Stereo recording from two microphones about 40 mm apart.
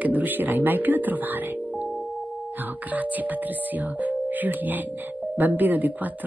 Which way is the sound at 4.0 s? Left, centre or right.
Right.